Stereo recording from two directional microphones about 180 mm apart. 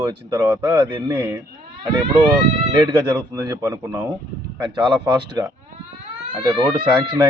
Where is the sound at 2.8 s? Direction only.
25° right (ahead or behind).